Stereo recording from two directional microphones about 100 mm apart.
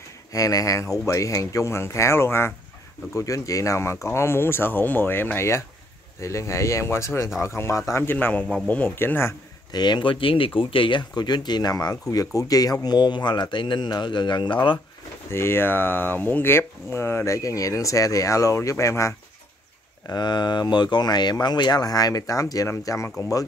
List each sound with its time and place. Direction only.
0.3 s speech: 35° left (ahead or behind)
9.7 s speech: 45° left (ahead or behind)
15.3 s speech: 25° left (ahead or behind)
20.1 s speech: 45° left (ahead or behind); by 23.1 s 30° left (ahead or behind)